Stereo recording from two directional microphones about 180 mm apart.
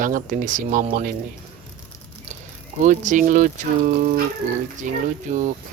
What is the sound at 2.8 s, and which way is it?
Speech, 45° right (ahead or behind).